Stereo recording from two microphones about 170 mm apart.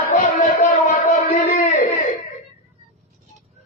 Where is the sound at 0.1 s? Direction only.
50° left (ahead or behind).